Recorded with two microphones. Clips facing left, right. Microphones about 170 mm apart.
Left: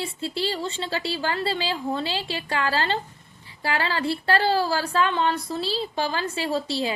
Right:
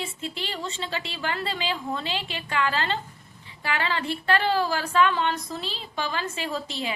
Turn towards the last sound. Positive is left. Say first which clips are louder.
# left 5 dB
turn(degrees=35)  # may be behind; listen again after turning